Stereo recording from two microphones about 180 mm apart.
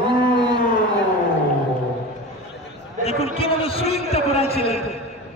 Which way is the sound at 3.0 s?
35° left (ahead or behind).